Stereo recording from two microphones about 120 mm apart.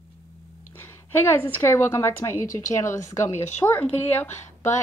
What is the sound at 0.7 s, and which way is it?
A woman's voice, 20° left (ahead or behind).